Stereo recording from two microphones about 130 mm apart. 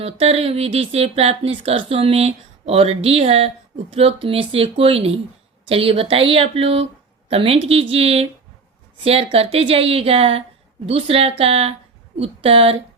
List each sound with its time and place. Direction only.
0.0 s speech: 50° right (ahead or behind)